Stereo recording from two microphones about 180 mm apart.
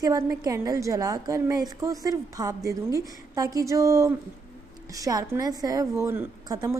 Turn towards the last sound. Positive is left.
turn(degrees=-15)  # may be behind; listen again after turning